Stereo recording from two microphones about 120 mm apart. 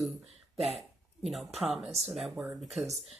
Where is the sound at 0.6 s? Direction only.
65° right (ahead or behind).